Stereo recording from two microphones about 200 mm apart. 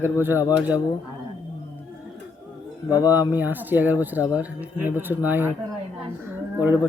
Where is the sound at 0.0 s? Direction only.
10° right (ahead or behind).